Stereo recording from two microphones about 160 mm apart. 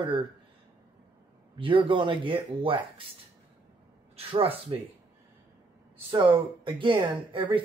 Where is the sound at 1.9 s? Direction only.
30° right (ahead or behind).